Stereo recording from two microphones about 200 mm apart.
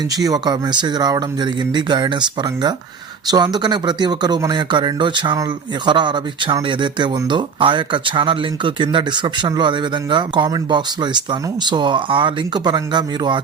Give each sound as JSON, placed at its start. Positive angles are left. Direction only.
{"t": 0.1, "sound": "speech", "side_deg": -20}